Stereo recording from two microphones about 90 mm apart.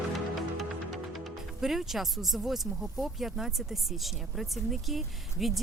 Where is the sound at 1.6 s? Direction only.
5° right (ahead or behind).